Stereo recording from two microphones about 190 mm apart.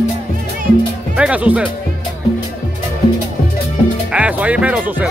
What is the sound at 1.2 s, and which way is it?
Speech, 5° right (ahead or behind).